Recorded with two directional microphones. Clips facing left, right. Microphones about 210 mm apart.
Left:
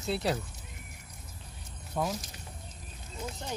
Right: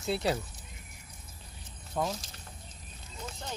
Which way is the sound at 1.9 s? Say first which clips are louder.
Even; centre (ahead or behind).